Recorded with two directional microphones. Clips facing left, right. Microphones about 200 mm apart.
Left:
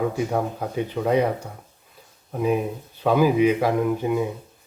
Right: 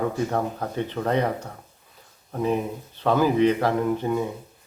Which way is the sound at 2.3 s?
10° left (ahead or behind).